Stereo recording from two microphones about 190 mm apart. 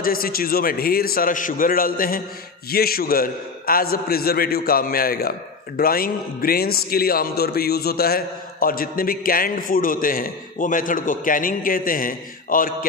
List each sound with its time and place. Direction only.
0.0 s speech: 50° left (ahead or behind)